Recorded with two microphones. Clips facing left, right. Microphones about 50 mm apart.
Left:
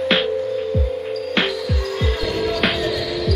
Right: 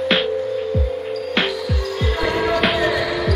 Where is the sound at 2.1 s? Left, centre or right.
Right.